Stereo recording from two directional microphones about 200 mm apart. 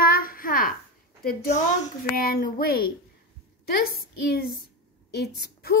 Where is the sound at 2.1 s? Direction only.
45° left (ahead or behind).